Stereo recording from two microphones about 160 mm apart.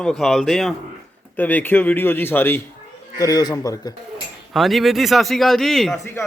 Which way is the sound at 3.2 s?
25° left (ahead or behind).